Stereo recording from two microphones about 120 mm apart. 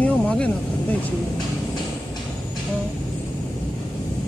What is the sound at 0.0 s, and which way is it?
Vehicle, 10° left (ahead or behind).